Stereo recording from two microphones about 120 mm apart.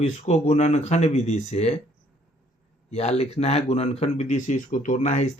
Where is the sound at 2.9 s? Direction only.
60° left (ahead or behind).